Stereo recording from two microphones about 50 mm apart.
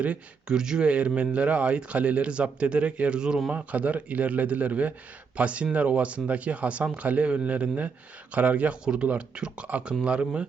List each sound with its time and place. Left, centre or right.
0.0 s speech: right
0.5 s speech: centre
3.5 s speech: right
8.8 s speech: centre